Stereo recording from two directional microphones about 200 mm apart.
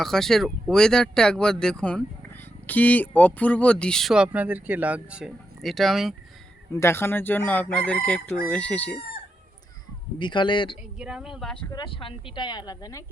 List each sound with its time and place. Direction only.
0.0 s speech: centre (ahead or behind)
2.6 s chicken: 10° left (ahead or behind)
3.2 s speech: 5° left (ahead or behind)
6.7 s chicken: 15° left (ahead or behind)
10.2 s speech: 25° left (ahead or behind)
11.0 s speech: 5° right (ahead or behind)
11.7 s speech: 25° left (ahead or behind)